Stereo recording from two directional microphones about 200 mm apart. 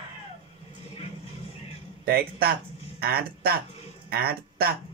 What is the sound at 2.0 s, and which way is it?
Speech, 50° right (ahead or behind).